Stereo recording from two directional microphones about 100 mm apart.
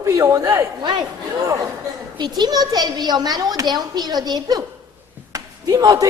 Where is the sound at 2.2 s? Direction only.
45° right (ahead or behind).